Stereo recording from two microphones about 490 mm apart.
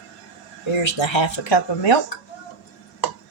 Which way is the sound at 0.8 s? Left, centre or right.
Left.